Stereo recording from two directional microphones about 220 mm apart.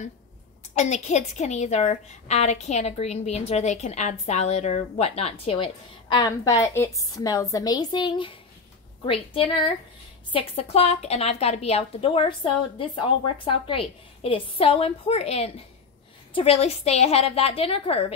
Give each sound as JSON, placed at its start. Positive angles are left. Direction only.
{"t": 0.7, "sound": "a woman's voice", "side_deg": 30}